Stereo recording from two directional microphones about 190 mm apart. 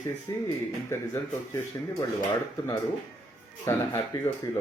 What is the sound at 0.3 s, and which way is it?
Speech, 15° left (ahead or behind).